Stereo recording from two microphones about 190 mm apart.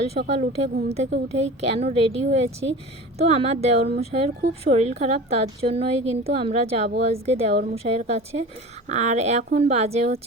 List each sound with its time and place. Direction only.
0.2 s a woman's voice: 50° right (ahead or behind)
0.5 s a woman's voice: 35° right (ahead or behind)